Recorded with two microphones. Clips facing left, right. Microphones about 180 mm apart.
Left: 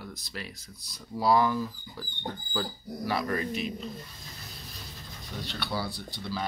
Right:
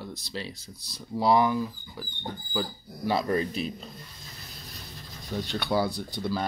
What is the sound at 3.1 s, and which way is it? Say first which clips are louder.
Speech: right 4 dB; 25° right (ahead or behind).